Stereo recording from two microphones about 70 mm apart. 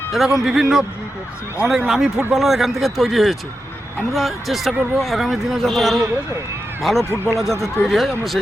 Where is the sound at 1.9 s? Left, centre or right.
Centre.